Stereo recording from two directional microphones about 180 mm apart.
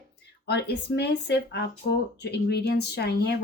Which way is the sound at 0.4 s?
65° left (ahead or behind).